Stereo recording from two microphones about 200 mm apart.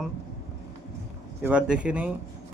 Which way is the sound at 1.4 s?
5° right (ahead or behind).